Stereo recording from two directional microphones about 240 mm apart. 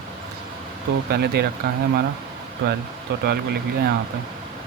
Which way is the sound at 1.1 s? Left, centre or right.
Right.